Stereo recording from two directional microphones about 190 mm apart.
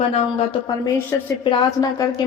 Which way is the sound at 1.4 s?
20° left (ahead or behind).